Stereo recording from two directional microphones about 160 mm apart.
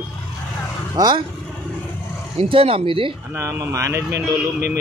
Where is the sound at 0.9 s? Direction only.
25° right (ahead or behind).